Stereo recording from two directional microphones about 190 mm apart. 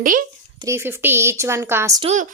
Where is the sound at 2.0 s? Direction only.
35° right (ahead or behind).